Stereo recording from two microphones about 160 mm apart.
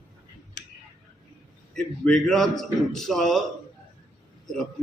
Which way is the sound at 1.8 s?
5° left (ahead or behind).